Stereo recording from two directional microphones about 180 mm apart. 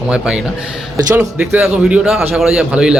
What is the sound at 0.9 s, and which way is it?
Speech, 20° right (ahead or behind).